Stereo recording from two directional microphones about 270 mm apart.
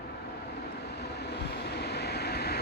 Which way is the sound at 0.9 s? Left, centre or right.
Left.